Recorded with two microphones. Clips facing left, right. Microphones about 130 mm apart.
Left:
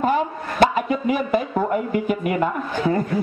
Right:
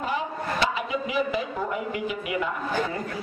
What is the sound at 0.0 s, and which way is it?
A man's voice, 50° left (ahead or behind).